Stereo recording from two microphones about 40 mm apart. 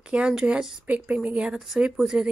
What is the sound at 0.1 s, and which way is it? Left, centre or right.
Speech, right.